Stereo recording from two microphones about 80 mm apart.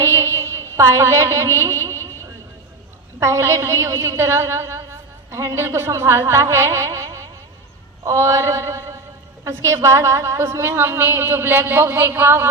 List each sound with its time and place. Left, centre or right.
0.0 s music: right
3.2 s a woman's voice: right